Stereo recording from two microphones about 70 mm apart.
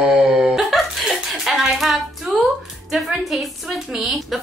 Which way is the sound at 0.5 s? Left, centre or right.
Centre.